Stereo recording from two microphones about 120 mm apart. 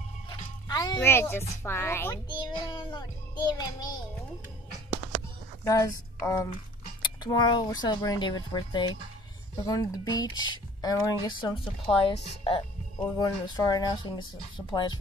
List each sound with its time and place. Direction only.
0.3 s music: 35° left (ahead or behind)
0.9 s a child's voice: 20° left (ahead or behind)
2.5 s speech: 40° left (ahead or behind)
5.6 s a woman's voice: 25° left (ahead or behind)
7.0 s speech: 40° left (ahead or behind)
13.2 s speech: 30° left (ahead or behind)